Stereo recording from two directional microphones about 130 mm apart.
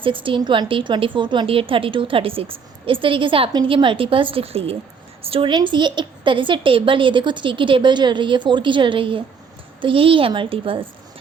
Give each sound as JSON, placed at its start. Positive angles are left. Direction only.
{"t": 0.0, "sound": "a woman's voice", "side_deg": -40}